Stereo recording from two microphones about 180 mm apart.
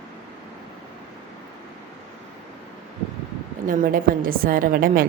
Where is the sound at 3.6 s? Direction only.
50° right (ahead or behind).